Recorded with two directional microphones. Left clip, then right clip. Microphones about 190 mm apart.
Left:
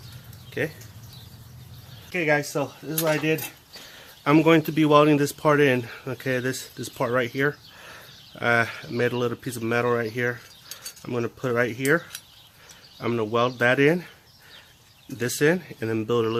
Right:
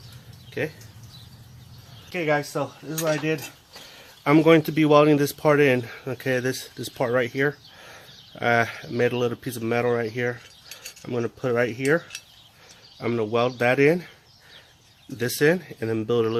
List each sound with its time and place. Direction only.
0.6 s speech: centre (ahead or behind)
2.0 s speech: 5° right (ahead or behind)
4.2 s speech: 15° right (ahead or behind)
15.2 s speech: 10° right (ahead or behind)